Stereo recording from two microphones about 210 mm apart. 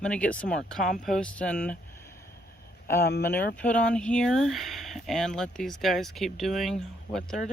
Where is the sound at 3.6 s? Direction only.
5° left (ahead or behind).